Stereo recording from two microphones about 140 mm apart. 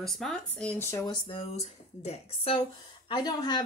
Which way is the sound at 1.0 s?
35° left (ahead or behind).